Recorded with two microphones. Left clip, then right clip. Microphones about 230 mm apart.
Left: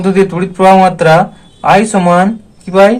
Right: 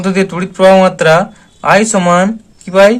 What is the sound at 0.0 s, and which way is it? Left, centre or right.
Speech, right.